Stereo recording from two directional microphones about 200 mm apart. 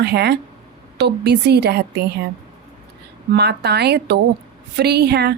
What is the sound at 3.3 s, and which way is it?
A woman's voice, 55° right (ahead or behind).